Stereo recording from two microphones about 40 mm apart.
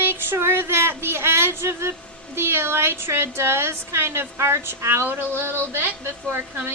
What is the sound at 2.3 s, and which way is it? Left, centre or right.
A woman's voice, right.